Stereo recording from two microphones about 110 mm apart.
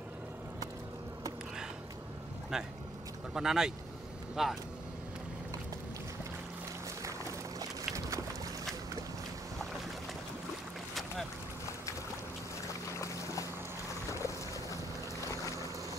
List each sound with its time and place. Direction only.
2.5 s speech: 5° right (ahead or behind)
7.0 s boat: 30° right (ahead or behind)
13.0 s boat: 30° left (ahead or behind)